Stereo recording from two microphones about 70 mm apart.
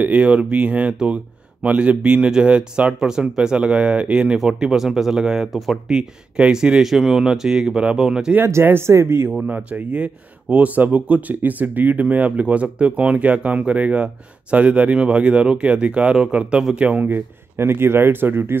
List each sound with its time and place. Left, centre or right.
0.0 s speech: centre
8.4 s speech: right
9.5 s speech: right